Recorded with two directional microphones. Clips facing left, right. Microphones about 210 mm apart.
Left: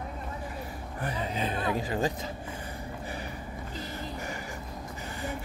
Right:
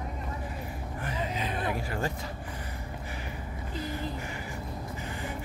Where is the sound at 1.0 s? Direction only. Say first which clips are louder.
Left 2 dB; 30° left (ahead or behind).